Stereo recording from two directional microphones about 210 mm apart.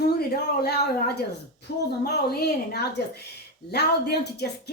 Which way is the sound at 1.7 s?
50° left (ahead or behind).